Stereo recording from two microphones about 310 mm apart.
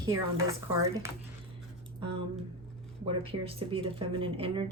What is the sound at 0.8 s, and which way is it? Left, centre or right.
Speech, centre.